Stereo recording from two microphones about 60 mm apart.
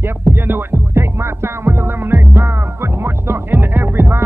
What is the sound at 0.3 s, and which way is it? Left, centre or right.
Music, right.